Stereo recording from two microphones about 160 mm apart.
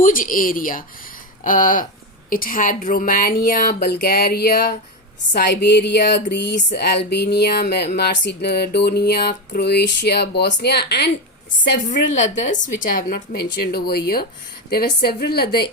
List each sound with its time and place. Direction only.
0.0 s a woman's voice: 60° left (ahead or behind); by 4.6 s 80° left
5.3 s a sound: 90° left
11.9 s a woman's voice: 50° left (ahead or behind); by 15.6 s 75° left (ahead or behind)